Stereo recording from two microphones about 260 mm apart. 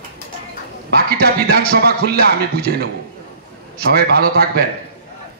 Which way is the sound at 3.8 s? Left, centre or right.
Right.